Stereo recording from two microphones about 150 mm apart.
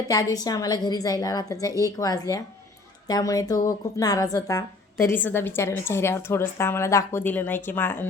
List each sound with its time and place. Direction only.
0.1 s a woman's voice: 25° left (ahead or behind)
5.0 s a woman's voice: 15° left (ahead or behind)